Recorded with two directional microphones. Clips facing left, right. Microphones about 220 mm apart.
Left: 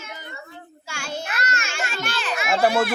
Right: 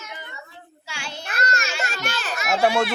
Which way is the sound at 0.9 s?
45° left (ahead or behind).